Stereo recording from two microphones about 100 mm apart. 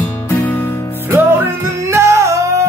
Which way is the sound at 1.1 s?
25° right (ahead or behind).